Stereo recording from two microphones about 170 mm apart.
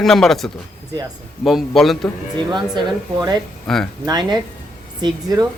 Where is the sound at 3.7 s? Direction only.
Centre (ahead or behind).